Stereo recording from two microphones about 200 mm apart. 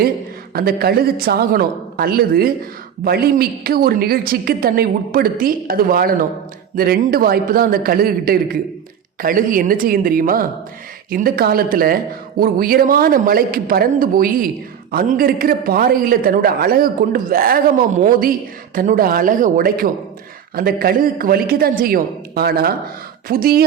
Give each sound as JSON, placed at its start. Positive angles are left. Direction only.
{"t": 0.5, "sound": "a man's voice", "side_deg": -50}